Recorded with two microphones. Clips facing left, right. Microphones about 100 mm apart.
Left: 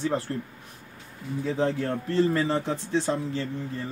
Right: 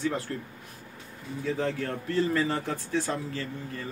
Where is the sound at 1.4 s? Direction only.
30° left (ahead or behind).